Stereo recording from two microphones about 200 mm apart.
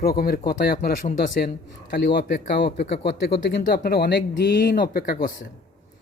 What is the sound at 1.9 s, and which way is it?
Speech, 55° left (ahead or behind).